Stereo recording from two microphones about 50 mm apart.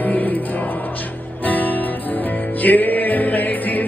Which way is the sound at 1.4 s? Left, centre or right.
Left.